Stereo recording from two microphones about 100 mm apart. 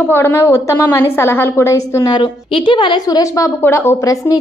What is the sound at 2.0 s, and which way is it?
A woman's voice, 50° left (ahead or behind).